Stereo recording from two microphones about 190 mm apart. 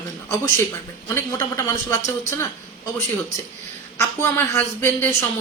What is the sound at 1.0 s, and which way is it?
Speech, 15° left (ahead or behind).